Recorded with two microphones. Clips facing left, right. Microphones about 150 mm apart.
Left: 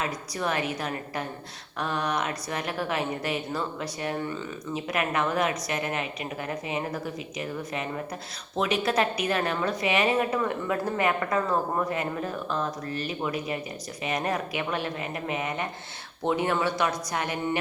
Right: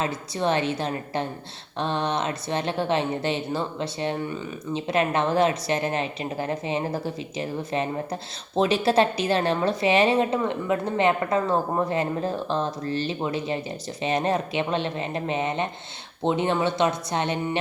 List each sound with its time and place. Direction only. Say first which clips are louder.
0.0 s a woman's voice: right 4 dB; 25° right (ahead or behind)